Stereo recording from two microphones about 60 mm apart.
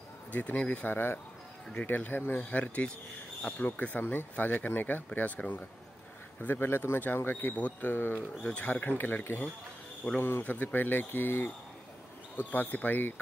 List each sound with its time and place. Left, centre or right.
0.3 s speech: left
0.9 s speech: left
2.5 s speech: left
6.4 s speech: left
8.4 s speech: left
8.9 s speech: left